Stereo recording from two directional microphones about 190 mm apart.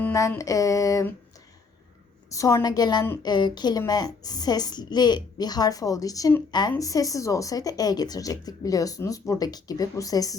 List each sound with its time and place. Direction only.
0.0 s speech: 15° left (ahead or behind)
2.3 s a woman's voice: 15° left (ahead or behind)